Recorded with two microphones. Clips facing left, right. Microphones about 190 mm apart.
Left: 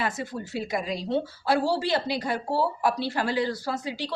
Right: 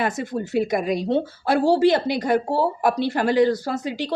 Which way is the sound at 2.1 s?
45° right (ahead or behind).